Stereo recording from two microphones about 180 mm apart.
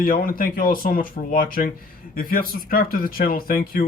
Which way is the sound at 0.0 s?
55° left (ahead or behind).